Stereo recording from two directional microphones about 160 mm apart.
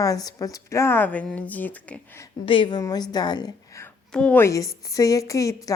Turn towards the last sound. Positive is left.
turn(degrees=20)  # may be behind; listen again after turning